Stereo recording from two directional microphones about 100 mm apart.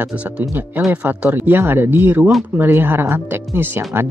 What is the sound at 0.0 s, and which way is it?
Speech, 15° right (ahead or behind).